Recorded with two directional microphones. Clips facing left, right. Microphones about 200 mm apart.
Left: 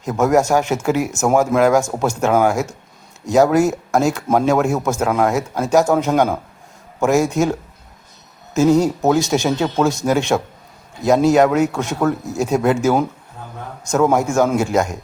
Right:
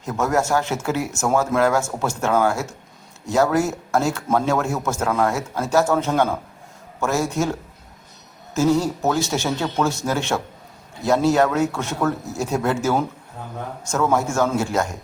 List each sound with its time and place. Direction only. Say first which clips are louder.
0.0 s a man's voice: left 6 dB; 15° left (ahead or behind)
8.5 s a man's voice: left 5 dB; 20° left (ahead or behind)